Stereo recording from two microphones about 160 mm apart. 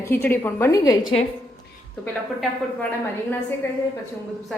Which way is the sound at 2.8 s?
10° left (ahead or behind).